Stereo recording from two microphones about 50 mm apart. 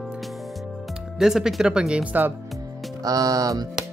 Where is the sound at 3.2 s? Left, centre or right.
Right.